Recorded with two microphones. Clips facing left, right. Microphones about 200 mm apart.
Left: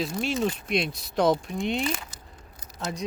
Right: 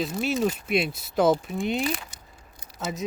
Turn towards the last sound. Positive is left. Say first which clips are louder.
# right 1 dB
turn(degrees=-5)  # may be behind; listen again after turning